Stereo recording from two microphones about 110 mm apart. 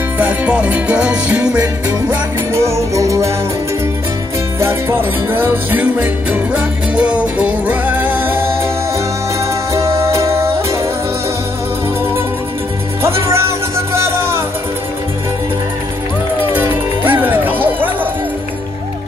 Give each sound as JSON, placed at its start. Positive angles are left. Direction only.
{"t": 0.2, "sound": "music", "side_deg": -15}
{"t": 2.6, "sound": "music", "side_deg": -25}
{"t": 4.6, "sound": "music", "side_deg": -20}
{"t": 9.8, "sound": "music", "side_deg": -25}
{"t": 13.0, "sound": "music", "side_deg": -25}
{"t": 16.5, "sound": "music", "side_deg": -15}